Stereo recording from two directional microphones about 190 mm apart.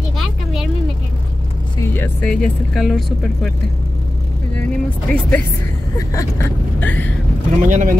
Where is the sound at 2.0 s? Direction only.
5° left (ahead or behind).